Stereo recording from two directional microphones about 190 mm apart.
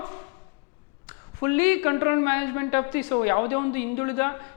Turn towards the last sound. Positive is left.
turn(degrees=15)  # may be behind; listen again after turning